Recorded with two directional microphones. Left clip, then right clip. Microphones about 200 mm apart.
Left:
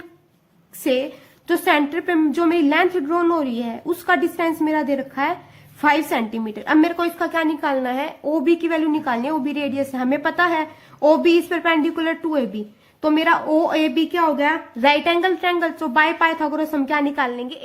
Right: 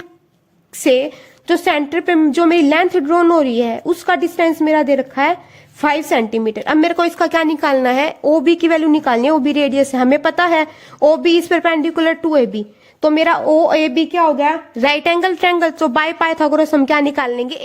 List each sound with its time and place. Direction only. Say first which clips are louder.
0.9 s a woman's voice: right 7 dB; 45° right (ahead or behind)
14.8 s a woman's voice: right 2 dB; 50° right (ahead or behind)